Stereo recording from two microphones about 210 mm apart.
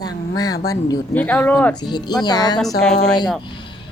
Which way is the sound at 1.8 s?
20° left (ahead or behind).